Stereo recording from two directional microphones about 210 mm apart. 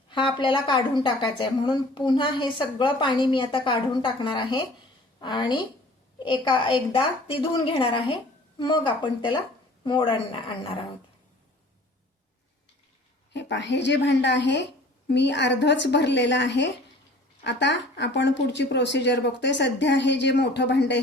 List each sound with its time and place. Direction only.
0.1 s a woman's voice: 25° left (ahead or behind)
13.3 s speech: 55° left (ahead or behind)